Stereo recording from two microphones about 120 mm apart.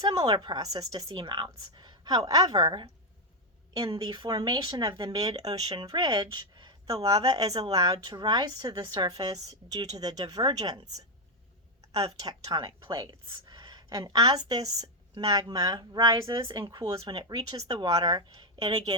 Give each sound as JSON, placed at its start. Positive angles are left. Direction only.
{"t": 0.3, "sound": "a woman's voice", "side_deg": -40}